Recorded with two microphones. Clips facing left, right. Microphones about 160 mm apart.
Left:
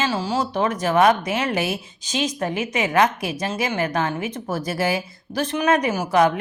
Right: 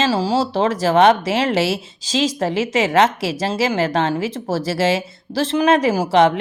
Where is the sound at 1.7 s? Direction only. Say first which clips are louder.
Right 5 dB; 90° right.